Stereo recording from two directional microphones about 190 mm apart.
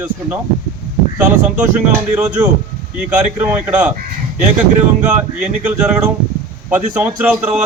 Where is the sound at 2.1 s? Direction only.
10° right (ahead or behind).